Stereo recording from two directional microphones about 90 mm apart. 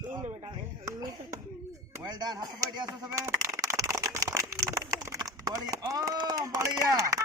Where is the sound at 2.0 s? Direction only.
50° right (ahead or behind).